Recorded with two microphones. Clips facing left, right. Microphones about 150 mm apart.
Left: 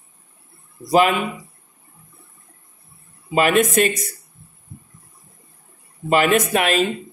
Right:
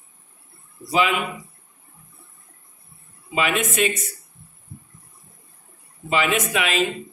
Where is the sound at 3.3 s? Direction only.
45° left (ahead or behind).